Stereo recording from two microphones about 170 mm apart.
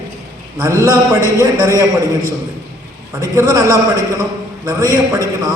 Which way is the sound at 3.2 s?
20° right (ahead or behind).